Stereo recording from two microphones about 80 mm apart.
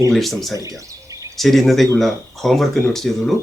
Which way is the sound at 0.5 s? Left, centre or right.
Right.